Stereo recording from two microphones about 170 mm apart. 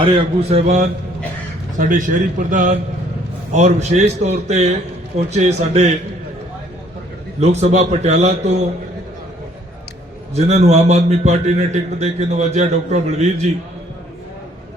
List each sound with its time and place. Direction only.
0.0 s a man's voice: 30° right (ahead or behind)
1.8 s a man's voice: 50° right (ahead or behind)
7.3 s a man's voice: 40° right (ahead or behind)
10.3 s a man's voice: 40° right (ahead or behind)